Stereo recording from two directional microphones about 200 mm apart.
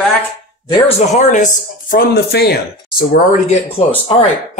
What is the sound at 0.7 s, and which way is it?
Speech, 30° left (ahead or behind).